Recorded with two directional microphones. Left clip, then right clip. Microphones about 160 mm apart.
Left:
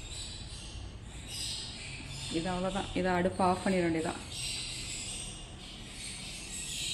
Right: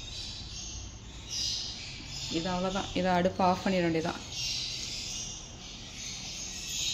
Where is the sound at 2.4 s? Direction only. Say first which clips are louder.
Right 2 dB; 20° right (ahead or behind).